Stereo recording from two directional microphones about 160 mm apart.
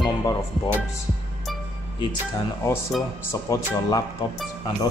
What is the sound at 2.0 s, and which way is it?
Speech, 25° left (ahead or behind).